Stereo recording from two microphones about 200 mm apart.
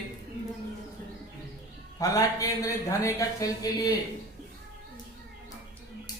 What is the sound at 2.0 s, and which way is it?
Speech, 15° left (ahead or behind).